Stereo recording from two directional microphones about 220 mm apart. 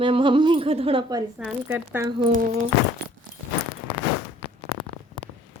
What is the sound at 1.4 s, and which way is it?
Speech, 5° right (ahead or behind).